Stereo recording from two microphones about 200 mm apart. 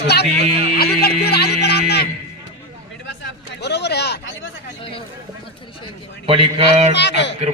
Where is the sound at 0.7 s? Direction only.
50° left (ahead or behind).